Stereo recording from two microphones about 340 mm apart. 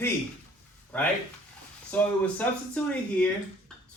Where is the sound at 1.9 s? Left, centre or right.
Centre.